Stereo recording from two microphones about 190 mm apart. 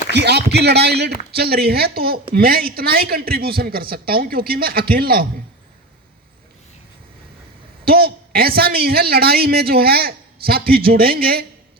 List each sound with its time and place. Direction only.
0.1 s a man's voice: 60° right (ahead or behind)
7.9 s a woman's voice: 55° right (ahead or behind)